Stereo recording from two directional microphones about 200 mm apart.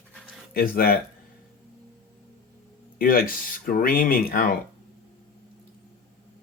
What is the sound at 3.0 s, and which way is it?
Speech, 45° left (ahead or behind).